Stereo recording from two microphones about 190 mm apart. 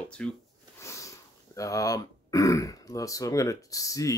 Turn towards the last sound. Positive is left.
turn(degrees=15)  # may be behind; listen again after turning